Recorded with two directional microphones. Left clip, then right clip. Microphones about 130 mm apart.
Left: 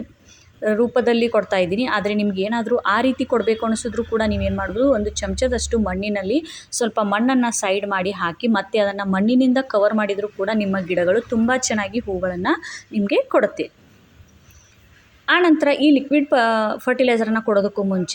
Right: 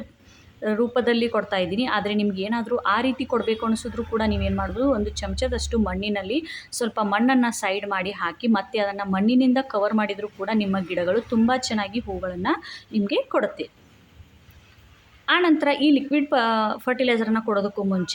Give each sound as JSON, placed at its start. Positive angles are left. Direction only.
{"t": 0.6, "sound": "a woman's voice", "side_deg": 20}
{"t": 15.3, "sound": "a woman's voice", "side_deg": 20}